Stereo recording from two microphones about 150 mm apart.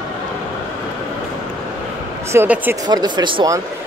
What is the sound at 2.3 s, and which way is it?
Speech, 15° right (ahead or behind).